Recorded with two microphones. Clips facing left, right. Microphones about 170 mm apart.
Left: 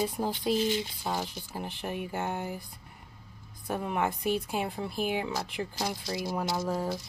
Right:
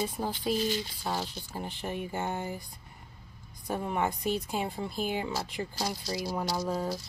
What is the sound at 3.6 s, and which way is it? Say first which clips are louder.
Speech: even; centre (ahead or behind).